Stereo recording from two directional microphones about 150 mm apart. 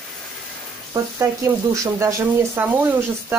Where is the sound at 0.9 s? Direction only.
20° right (ahead or behind).